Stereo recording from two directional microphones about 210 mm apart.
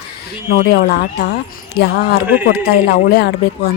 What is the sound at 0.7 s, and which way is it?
Speech, 50° left (ahead or behind).